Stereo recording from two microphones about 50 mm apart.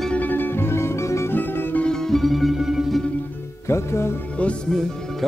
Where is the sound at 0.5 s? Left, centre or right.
Left.